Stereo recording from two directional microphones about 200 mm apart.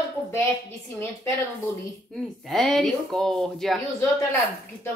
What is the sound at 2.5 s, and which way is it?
A woman's voice, centre (ahead or behind).